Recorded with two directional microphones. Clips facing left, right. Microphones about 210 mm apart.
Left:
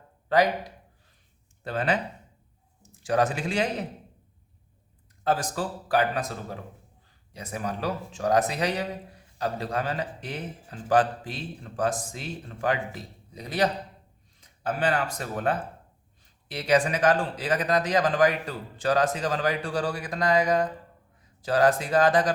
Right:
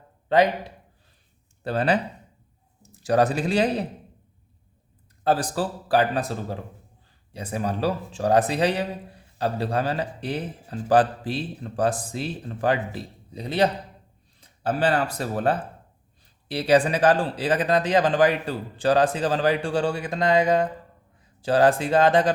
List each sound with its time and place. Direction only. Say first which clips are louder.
0.3 s a man's voice: right 3 dB; 25° right (ahead or behind)
5.2 s a man's voice: right 4 dB; 35° right (ahead or behind)